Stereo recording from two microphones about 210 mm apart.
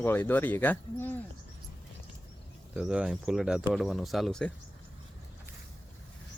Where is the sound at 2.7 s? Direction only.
5° right (ahead or behind).